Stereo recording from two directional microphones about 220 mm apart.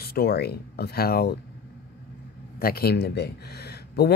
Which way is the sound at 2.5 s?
45° left (ahead or behind).